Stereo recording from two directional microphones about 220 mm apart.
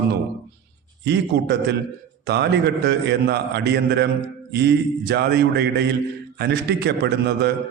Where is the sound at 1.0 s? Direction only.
50° right (ahead or behind).